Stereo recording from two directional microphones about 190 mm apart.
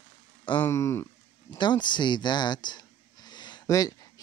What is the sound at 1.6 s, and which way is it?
Speech, 25° left (ahead or behind).